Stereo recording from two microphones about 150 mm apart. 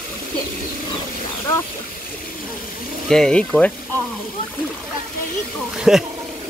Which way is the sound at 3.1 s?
5° left (ahead or behind).